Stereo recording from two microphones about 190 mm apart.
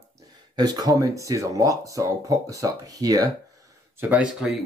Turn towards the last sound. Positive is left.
turn(degrees=-5)  # may be behind; listen again after turning